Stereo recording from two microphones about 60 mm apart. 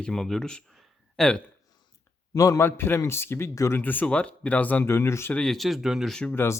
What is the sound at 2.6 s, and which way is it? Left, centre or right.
Speech, left.